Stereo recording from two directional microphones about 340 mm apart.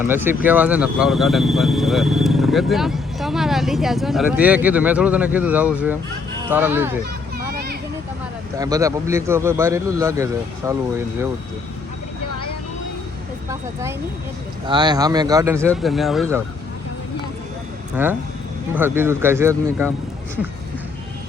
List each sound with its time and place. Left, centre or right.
0.0 s a man's voice: centre
7.0 s a sound: right
8.5 s a man's voice: centre
14.7 s a man's voice: centre
17.9 s a man's voice: centre